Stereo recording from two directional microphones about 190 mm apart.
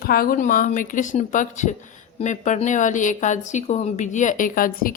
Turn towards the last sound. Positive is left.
turn(degrees=45)  # may be behind; listen again after turning